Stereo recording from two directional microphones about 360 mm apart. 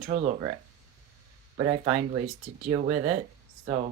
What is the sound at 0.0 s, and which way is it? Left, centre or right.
Speech, centre.